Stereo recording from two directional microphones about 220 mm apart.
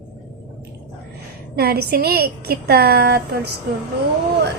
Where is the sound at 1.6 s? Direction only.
45° right (ahead or behind).